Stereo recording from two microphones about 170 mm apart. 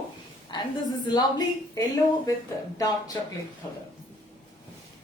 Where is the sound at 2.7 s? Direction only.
20° left (ahead or behind).